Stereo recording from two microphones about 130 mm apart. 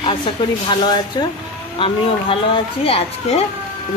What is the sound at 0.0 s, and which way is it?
Speech, 40° left (ahead or behind).